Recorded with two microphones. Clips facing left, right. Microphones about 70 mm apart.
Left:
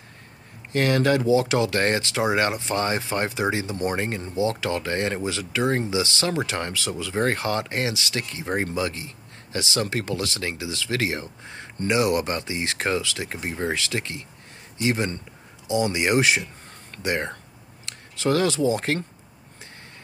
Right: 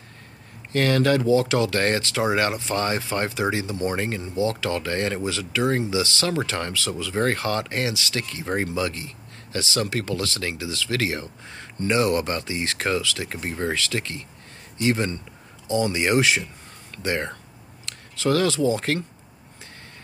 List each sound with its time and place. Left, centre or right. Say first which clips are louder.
0.7 s speech: right 1 dB; left